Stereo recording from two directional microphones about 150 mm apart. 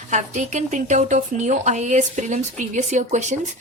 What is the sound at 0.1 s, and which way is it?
Speech, 50° right (ahead or behind).